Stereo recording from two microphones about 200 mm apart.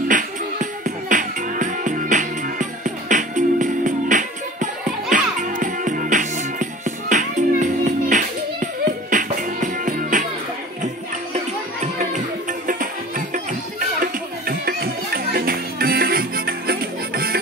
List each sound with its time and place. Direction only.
0.1 s music: 40° right (ahead or behind)
11.3 s music: 35° right (ahead or behind)